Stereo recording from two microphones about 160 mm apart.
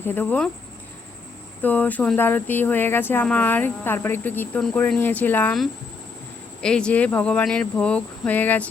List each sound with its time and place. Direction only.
0.0 s speech: 10° left (ahead or behind)
1.6 s speech: 10° left (ahead or behind)